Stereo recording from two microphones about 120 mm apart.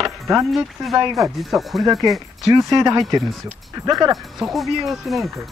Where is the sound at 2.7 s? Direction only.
35° right (ahead or behind).